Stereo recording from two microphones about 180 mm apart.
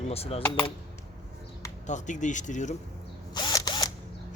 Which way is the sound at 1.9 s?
45° left (ahead or behind).